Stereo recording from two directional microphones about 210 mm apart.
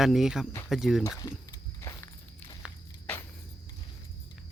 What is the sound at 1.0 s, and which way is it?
Speech, 15° left (ahead or behind).